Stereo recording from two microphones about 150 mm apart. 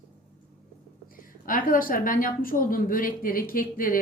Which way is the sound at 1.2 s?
70° left (ahead or behind).